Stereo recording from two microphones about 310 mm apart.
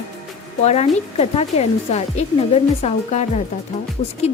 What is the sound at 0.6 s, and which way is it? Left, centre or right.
Speech, left.